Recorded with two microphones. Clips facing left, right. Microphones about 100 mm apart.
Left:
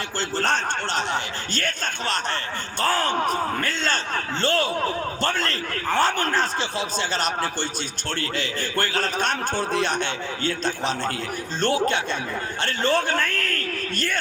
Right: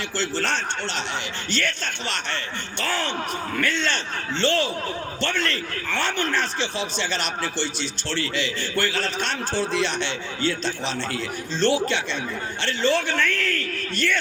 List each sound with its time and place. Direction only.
0.2 s a man's voice: 45° left (ahead or behind)